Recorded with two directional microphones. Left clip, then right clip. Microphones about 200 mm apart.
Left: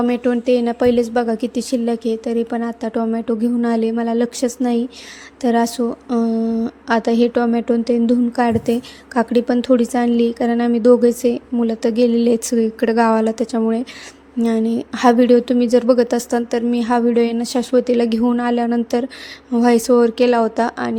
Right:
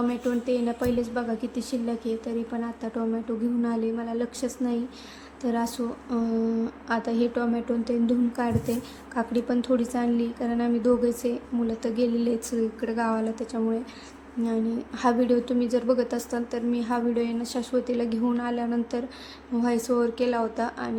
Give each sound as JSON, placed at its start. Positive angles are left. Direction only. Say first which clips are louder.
{"t": 0.1, "sound": "a woman's voice", "louder": "left 10 dB", "side_deg": 40}